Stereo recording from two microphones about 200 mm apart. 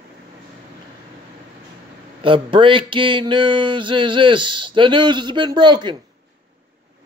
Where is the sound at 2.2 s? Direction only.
25° right (ahead or behind).